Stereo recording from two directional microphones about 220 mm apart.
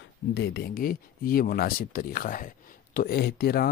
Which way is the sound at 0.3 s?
50° left (ahead or behind).